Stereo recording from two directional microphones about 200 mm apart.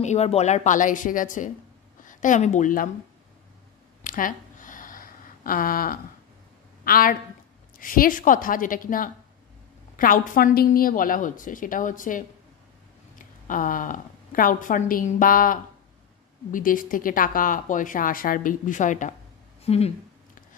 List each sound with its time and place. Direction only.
0.0 s a woman's voice: 35° left (ahead or behind)
4.0 s a sound: 40° left (ahead or behind)
6.8 s speech: 45° left (ahead or behind)
13.5 s speech: 40° left (ahead or behind)